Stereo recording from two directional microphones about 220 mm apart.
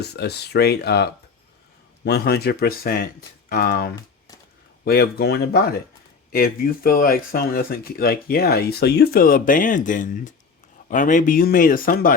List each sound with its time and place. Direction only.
0.0 s speech: 50° left (ahead or behind)